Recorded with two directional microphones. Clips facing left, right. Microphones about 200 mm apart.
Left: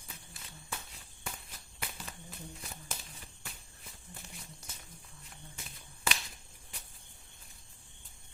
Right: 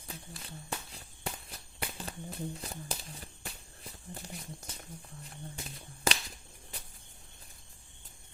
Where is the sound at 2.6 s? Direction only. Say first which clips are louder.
Right 6 dB; 35° right (ahead or behind).